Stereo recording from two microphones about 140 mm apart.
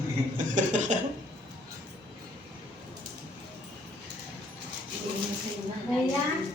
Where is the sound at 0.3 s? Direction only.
60° right (ahead or behind).